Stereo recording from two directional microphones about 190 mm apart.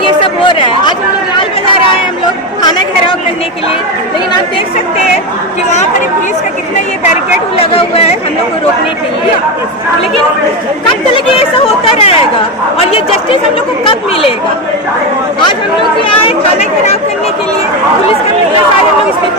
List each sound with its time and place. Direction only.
0.0 s chatter: 25° left (ahead or behind)
2.6 s chatter: 20° left (ahead or behind)
7.5 s speech: 30° left (ahead or behind)
11.1 s speech: 30° left (ahead or behind)
16.0 s speech: 30° left (ahead or behind)